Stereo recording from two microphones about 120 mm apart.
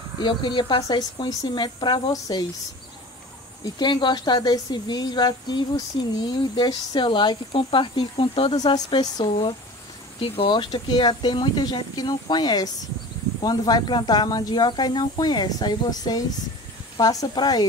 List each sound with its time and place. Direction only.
0.2 s speech: 40° left (ahead or behind)
3.6 s speech: 35° left (ahead or behind)
8.5 s speech: 35° left (ahead or behind)
9.2 s speech: 45° left (ahead or behind)